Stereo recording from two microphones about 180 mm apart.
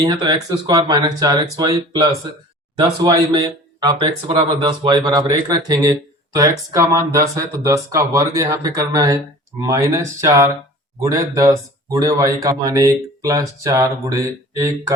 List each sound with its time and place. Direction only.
0.0 s speech: 25° right (ahead or behind)